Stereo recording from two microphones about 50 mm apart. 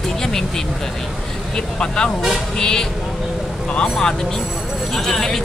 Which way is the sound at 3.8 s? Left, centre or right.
Centre.